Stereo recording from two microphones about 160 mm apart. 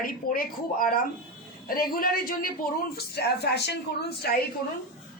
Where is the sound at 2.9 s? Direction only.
90° left.